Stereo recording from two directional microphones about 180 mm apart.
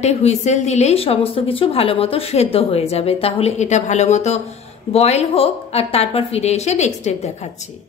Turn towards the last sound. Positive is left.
turn(degrees=40)  # may be behind; listen again after turning